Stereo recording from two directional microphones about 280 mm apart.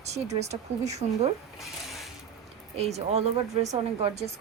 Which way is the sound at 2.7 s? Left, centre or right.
Right.